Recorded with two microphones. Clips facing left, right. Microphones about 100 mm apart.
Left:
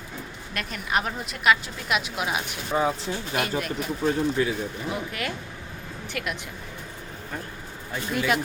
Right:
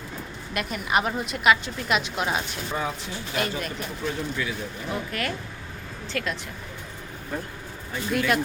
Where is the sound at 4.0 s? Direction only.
35° left (ahead or behind).